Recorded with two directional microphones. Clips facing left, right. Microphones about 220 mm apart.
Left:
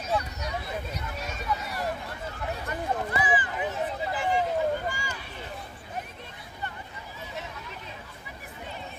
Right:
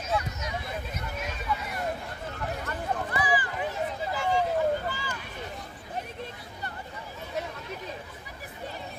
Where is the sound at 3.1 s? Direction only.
20° left (ahead or behind).